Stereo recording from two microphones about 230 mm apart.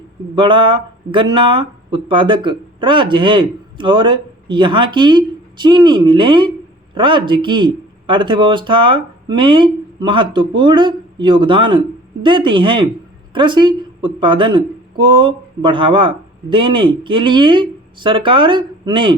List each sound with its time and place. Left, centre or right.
0.3 s a woman's voice: right